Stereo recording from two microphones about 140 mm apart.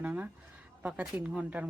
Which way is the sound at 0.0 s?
10° right (ahead or behind).